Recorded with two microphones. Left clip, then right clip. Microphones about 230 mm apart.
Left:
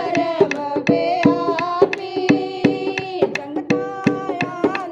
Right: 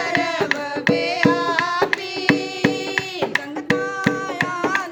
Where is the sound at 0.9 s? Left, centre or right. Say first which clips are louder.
Left 6 dB; centre.